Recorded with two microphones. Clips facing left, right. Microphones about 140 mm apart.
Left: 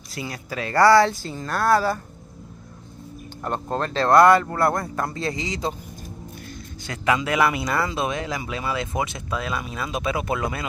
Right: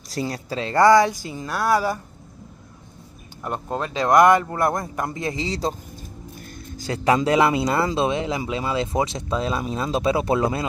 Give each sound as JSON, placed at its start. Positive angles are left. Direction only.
{"t": 0.1, "sound": "speech", "side_deg": -35}
{"t": 3.4, "sound": "speech", "side_deg": -5}
{"t": 6.8, "sound": "speech", "side_deg": -35}